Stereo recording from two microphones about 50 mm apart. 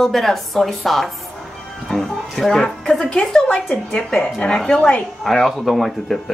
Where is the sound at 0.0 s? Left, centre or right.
Centre.